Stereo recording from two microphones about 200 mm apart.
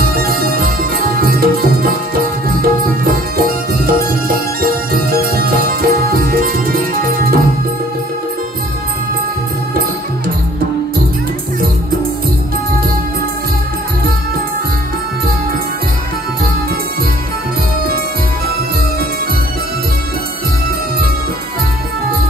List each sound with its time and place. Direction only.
0.1 s music: 50° right (ahead or behind)
3.4 s music: 50° right (ahead or behind)